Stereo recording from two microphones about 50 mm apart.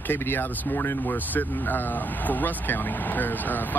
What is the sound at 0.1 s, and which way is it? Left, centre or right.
Speech, left.